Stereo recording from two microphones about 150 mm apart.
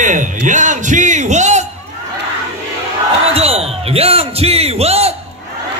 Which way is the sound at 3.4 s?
40° right (ahead or behind).